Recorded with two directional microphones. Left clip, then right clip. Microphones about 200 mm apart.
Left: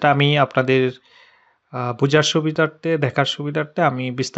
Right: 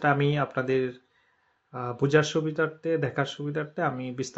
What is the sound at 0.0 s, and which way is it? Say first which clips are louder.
Speech: left 9 dB; 40° left (ahead or behind).